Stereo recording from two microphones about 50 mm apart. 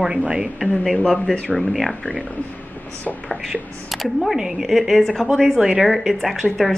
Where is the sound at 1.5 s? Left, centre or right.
Centre.